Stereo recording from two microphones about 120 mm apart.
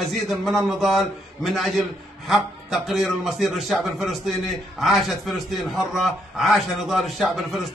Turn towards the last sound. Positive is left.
turn(degrees=0)  # may be behind; listen again after turning